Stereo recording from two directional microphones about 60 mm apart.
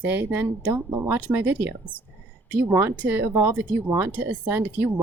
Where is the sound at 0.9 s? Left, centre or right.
Right.